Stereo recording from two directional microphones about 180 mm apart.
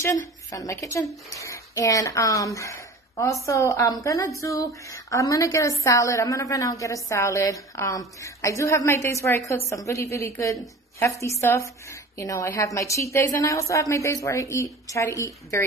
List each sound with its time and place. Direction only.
0.0 s a woman's voice: 15° left (ahead or behind)